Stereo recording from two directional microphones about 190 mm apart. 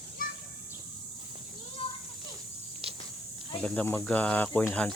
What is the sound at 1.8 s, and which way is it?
Children playing, 30° left (ahead or behind).